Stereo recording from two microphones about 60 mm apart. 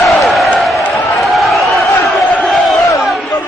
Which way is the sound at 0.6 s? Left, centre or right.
Centre.